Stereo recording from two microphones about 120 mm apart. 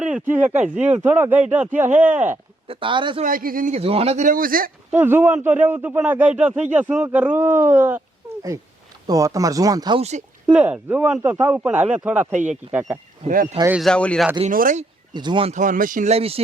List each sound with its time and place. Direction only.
0.0 s a man's voice: 10° right (ahead or behind)
2.6 s speech: 45° right (ahead or behind)
3.2 s a man's voice: 70° right (ahead or behind)
3.8 s speech: 55° right (ahead or behind); by 4.4 s 75° right (ahead or behind)
4.9 s a man's voice: 15° right (ahead or behind)
9.0 s speech: 30° right (ahead or behind)
10.0 s a man's voice: 70° right (ahead or behind)
10.4 s a man's voice: 10° right (ahead or behind)
12.3 s speech: 90° right
13.7 s speech: 5° left (ahead or behind)
14.4 s a man's voice: 70° right (ahead or behind)
15.1 s speech: 40° right (ahead or behind)
15.4 s speech: 90° right; by 16.4 s 55° right (ahead or behind)